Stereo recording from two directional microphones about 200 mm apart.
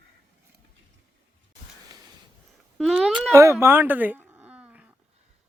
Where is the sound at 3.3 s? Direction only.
15° right (ahead or behind).